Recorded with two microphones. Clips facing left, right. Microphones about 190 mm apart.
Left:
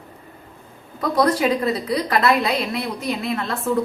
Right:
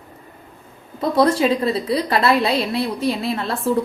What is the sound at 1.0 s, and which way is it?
A woman's voice, 25° right (ahead or behind).